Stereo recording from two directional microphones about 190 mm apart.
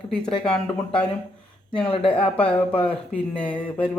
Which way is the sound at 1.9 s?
30° left (ahead or behind).